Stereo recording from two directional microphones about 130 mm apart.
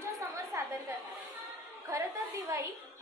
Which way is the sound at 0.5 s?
20° right (ahead or behind).